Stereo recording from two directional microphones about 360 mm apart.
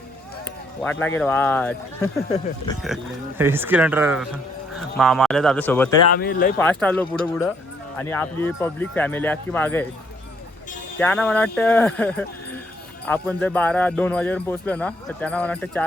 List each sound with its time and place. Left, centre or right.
0.8 s speech: centre
6.1 s speech: left
6.6 s speech: centre
10.9 s speech: centre